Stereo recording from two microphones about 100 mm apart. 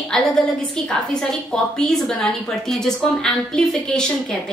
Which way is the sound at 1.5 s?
5° left (ahead or behind).